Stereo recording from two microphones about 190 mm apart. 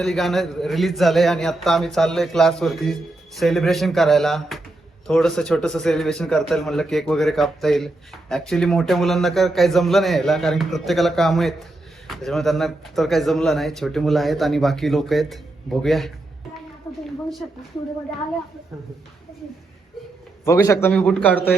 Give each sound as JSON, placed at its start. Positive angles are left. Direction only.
{"t": 0.0, "sound": "a man's voice", "side_deg": 0}
{"t": 16.9, "sound": "a sound", "side_deg": 15}
{"t": 20.4, "sound": "a man's voice", "side_deg": 15}